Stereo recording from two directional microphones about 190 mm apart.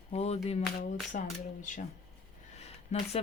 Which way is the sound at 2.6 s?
35° left (ahead or behind).